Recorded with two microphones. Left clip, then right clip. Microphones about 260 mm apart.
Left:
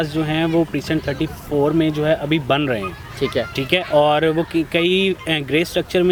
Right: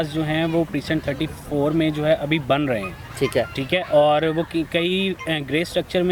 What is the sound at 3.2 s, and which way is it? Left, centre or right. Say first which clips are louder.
Speech: left 1 dB; right.